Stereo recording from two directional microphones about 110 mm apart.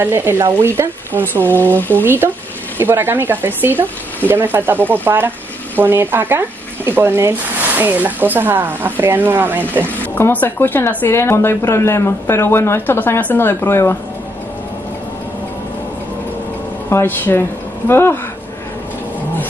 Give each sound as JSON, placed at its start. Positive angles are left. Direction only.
{"t": 0.0, "sound": "speech", "side_deg": -20}
{"t": 1.6, "sound": "speech", "side_deg": 15}
{"t": 2.0, "sound": "speech", "side_deg": -20}
{"t": 10.1, "sound": "speech", "side_deg": 20}
{"t": 16.9, "sound": "speech", "side_deg": 20}